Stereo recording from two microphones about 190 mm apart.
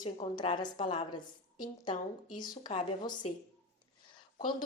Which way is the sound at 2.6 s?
25° left (ahead or behind).